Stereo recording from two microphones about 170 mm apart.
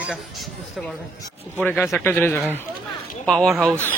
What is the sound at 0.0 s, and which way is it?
Speech, centre (ahead or behind).